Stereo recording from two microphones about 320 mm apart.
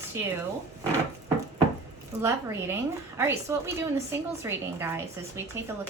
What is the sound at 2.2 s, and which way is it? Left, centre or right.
A woman's voice, centre.